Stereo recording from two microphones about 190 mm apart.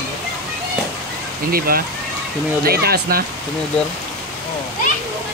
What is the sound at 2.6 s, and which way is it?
Speech, 55° right (ahead or behind).